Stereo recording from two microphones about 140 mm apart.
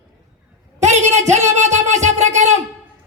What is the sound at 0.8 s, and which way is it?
A man's voice, 55° right (ahead or behind).